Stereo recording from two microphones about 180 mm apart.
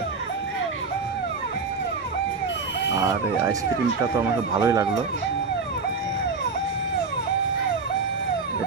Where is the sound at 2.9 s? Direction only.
20° right (ahead or behind).